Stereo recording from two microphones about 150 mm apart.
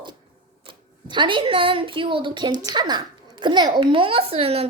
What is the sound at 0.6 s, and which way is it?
A child's voice, 35° right (ahead or behind).